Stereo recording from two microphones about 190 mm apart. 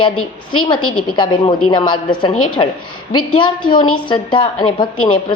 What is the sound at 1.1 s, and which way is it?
A woman's voice, 25° left (ahead or behind).